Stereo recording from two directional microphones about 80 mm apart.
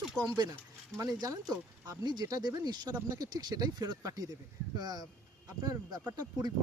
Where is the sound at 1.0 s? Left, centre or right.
Right.